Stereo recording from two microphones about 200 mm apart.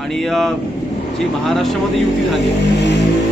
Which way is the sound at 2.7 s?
60° left (ahead or behind).